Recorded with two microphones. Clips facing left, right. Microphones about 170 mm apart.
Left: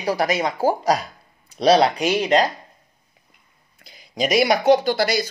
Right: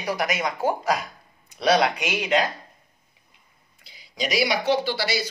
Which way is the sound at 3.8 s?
50° left (ahead or behind).